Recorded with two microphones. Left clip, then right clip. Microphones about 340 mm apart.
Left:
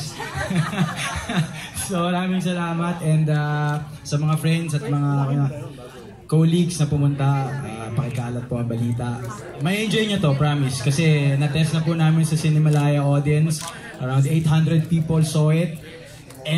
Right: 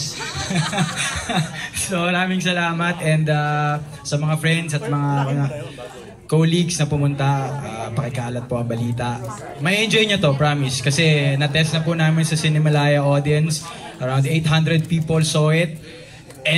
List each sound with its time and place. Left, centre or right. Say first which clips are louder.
1.9 s a man's voice: right 3 dB; right
6.3 s a man's voice: right 3 dB; right
9.6 s a man's voice: right 5 dB; right